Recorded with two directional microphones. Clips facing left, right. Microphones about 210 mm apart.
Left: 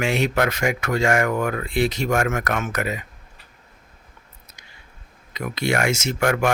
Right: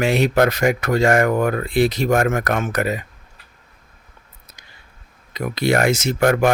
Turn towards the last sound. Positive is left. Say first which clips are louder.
# right 4 dB
turn(degrees=-35)  # may be behind; listen again after turning